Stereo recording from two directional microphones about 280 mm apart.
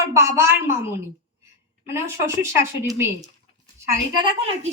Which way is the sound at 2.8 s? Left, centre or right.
Centre.